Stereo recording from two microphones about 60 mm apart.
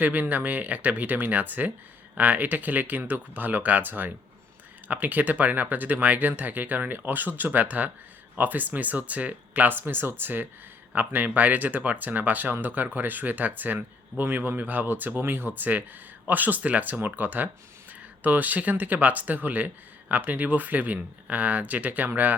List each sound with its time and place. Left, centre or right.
0.0 s speech: right